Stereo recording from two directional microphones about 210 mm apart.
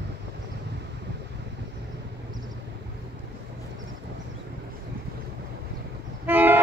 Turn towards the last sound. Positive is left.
turn(degrees=-10)  # may be behind; listen again after turning